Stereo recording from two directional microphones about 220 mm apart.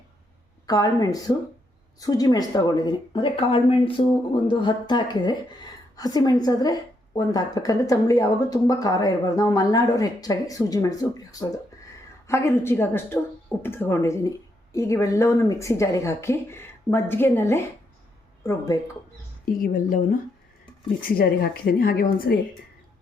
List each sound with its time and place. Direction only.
0.7 s a woman's voice: 15° left (ahead or behind)
19.6 s a woman's voice: 40° left (ahead or behind)